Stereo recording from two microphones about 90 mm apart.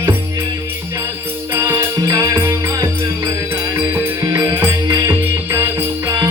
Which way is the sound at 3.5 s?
30° right (ahead or behind).